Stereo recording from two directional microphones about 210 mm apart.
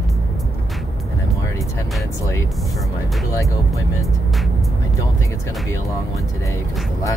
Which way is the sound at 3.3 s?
15° left (ahead or behind).